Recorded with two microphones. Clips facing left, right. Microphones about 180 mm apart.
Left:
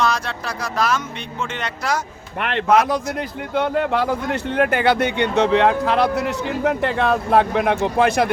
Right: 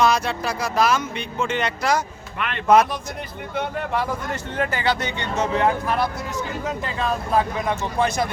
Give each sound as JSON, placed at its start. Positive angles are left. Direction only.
{"t": 0.0, "sound": "speech", "side_deg": -5}
{"t": 2.4, "sound": "speech", "side_deg": 70}